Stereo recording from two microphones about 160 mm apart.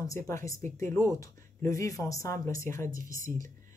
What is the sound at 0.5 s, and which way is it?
Speech, 15° left (ahead or behind).